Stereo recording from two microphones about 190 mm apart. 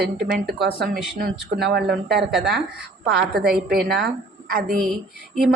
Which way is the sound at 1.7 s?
60° right (ahead or behind).